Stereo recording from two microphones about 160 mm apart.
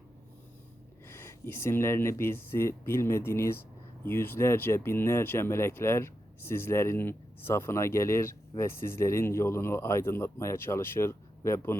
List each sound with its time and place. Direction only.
1.0 s speech: 15° left (ahead or behind)